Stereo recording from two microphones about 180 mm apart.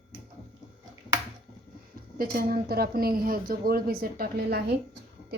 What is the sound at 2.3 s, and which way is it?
A woman's voice, 60° right (ahead or behind).